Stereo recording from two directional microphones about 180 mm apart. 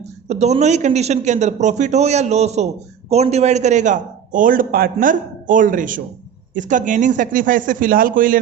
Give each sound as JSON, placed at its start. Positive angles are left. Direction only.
{"t": 0.3, "sound": "a man's voice", "side_deg": -35}